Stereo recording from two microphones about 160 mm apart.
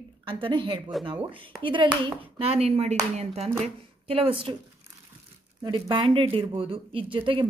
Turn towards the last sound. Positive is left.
turn(degrees=-30)  # may be behind; listen again after turning